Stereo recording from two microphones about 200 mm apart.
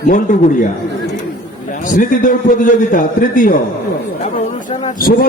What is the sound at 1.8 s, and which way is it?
A man's voice, 40° left (ahead or behind).